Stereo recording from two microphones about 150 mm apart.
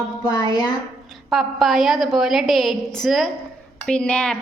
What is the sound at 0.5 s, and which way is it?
Speech, 25° left (ahead or behind).